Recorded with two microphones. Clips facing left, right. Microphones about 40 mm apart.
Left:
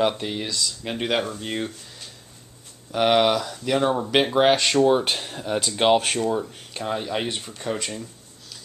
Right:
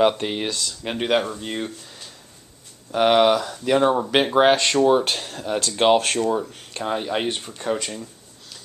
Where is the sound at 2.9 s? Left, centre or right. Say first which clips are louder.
Right 3 dB; centre.